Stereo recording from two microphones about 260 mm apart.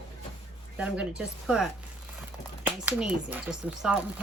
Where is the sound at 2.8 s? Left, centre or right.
Centre.